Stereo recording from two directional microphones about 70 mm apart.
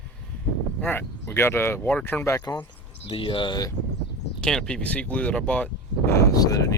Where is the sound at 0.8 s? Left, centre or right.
Left.